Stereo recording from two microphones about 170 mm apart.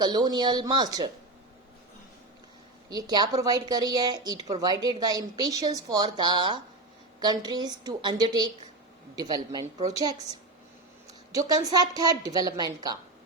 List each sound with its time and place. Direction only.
0.0 s a woman's voice: 25° right (ahead or behind)
2.9 s a woman's voice: 25° right (ahead or behind)
11.3 s a woman's voice: 20° right (ahead or behind)